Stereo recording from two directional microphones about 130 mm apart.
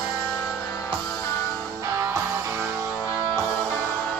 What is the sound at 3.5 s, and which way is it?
Music, centre (ahead or behind).